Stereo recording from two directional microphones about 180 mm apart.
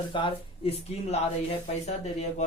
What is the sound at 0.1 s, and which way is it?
Speech, 30° left (ahead or behind).